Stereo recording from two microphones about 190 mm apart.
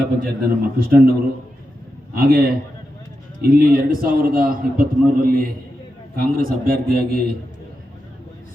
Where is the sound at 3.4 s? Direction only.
50° right (ahead or behind).